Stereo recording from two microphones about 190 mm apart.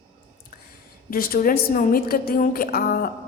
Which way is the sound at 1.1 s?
50° left (ahead or behind).